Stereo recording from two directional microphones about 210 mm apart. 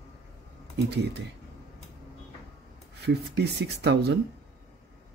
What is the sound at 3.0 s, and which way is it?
Speech, 50° right (ahead or behind).